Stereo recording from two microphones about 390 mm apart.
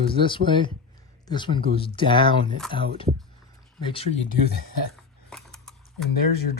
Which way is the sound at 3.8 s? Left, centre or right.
Centre.